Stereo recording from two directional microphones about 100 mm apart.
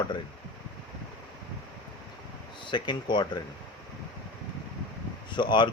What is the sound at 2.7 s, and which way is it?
Speech, 50° left (ahead or behind).